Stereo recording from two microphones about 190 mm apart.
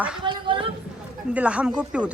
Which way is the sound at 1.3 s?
5° right (ahead or behind).